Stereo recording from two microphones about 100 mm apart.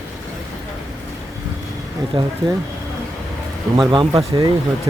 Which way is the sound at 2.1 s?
50° right (ahead or behind).